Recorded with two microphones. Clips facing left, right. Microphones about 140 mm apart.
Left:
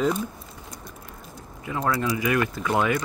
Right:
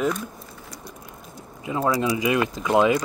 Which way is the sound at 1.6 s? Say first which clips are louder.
Right 3 dB; 20° right (ahead or behind).